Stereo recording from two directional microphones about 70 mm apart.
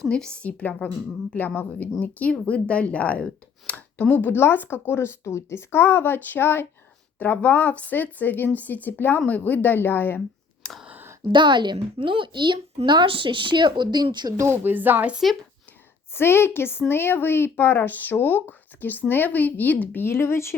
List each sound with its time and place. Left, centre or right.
0.0 s a woman's voice: centre; by 10.2 s left
10.6 s a sound: centre
11.3 s speech: right
14.3 s speech: right
16.1 s speech: left